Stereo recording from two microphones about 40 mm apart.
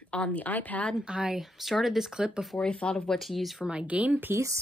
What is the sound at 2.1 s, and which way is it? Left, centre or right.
Speech, right.